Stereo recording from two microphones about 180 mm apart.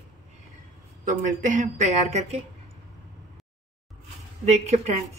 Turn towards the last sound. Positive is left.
turn(degrees=-40)  # may be behind; listen again after turning